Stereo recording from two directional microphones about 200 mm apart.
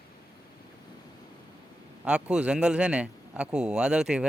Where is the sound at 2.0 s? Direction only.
5° right (ahead or behind).